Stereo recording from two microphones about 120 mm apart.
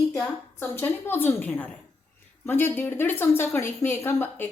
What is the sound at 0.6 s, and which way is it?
A woman's voice, 20° left (ahead or behind).